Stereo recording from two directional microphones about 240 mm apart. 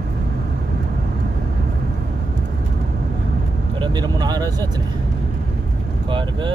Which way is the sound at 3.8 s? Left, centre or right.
Centre.